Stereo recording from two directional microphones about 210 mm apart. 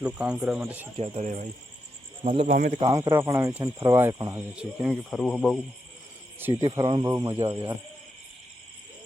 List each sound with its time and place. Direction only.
0.0 s speech: 5° right (ahead or behind)
0.9 s speech: 30° right (ahead or behind); by 5.5 s centre (ahead or behind)
6.5 s speech: 20° right (ahead or behind)